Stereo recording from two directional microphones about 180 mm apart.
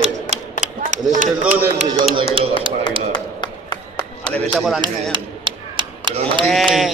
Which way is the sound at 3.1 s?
25° left (ahead or behind).